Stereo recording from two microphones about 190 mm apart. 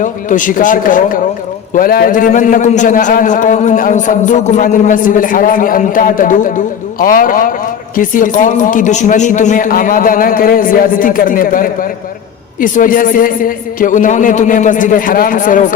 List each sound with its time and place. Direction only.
0.0 s a man's voice: 45° left (ahead or behind)